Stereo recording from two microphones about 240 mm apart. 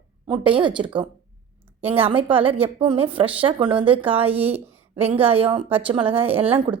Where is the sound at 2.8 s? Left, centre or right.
Centre.